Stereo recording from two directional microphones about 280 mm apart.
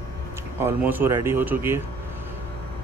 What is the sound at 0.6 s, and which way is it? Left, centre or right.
Speech, centre.